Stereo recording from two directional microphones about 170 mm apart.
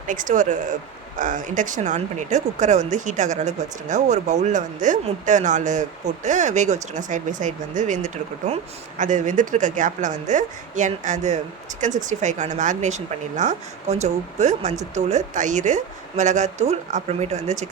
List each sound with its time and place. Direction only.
0.1 s speech: 50° right (ahead or behind)